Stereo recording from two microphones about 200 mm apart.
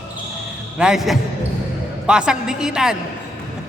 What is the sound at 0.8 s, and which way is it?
A woman's voice, centre (ahead or behind).